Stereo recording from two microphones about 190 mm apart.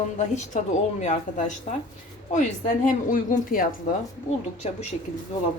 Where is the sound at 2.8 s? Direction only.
45° left (ahead or behind).